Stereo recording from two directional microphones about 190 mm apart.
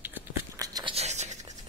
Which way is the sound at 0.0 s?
15° right (ahead or behind).